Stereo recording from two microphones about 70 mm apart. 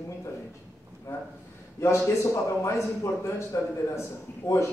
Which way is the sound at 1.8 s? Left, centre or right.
Left.